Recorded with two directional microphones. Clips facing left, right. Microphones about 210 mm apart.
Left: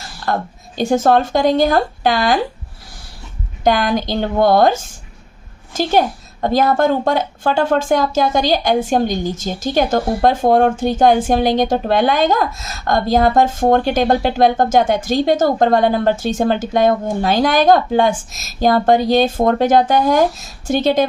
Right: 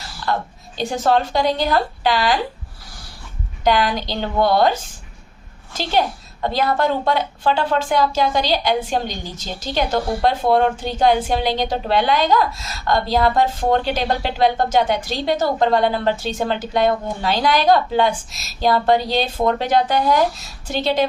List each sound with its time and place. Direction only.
0.3 s a woman's voice: 45° left (ahead or behind)
3.6 s a woman's voice: 50° left (ahead or behind)